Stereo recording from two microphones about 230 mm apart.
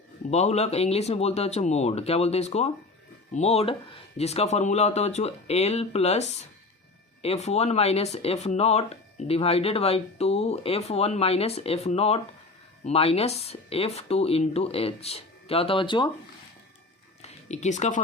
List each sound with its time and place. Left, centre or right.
0.3 s speech: left
17.2 s speech: left